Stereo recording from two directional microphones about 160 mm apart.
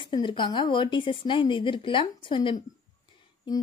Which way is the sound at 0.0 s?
30° left (ahead or behind).